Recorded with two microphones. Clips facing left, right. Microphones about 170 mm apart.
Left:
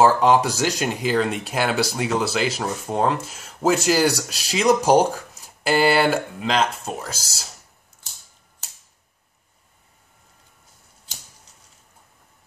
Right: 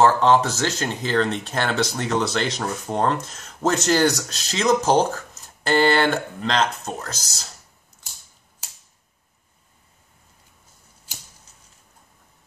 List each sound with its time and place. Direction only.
0.0 s speech: 10° left (ahead or behind)